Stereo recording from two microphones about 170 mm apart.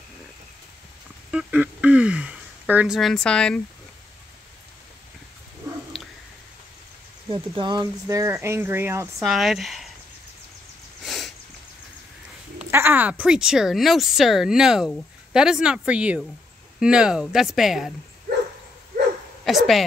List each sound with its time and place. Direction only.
1.3 s a sound: 5° right (ahead or behind)
5.6 s a sound: 25° right (ahead or behind)
7.2 s speech: 30° right (ahead or behind)
9.2 s speech: centre (ahead or behind)
11.1 s sniff: centre (ahead or behind)
12.7 s speech: 10° right (ahead or behind)
19.4 s speech: centre (ahead or behind)